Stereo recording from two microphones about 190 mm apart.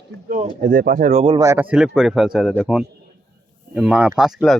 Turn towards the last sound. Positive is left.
turn(degrees=-5)  # may be behind; listen again after turning